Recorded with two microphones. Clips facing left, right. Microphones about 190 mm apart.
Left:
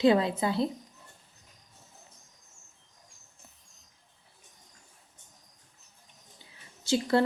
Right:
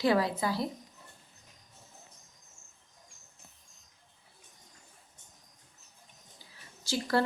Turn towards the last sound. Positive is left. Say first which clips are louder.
# left 5 dB
turn(degrees=25)  # may be behind; listen again after turning